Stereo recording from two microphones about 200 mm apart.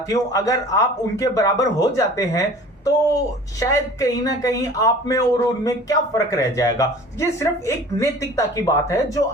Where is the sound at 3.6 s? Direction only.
15° left (ahead or behind).